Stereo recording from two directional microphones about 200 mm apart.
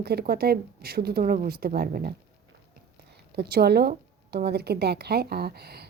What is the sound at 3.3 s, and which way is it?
Speech, 50° right (ahead or behind).